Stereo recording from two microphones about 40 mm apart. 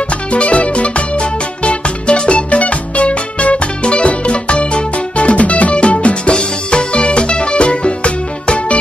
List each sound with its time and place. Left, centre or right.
0.3 s music: left